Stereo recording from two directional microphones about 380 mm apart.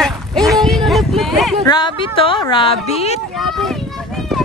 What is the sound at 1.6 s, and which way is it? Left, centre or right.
Speech, centre.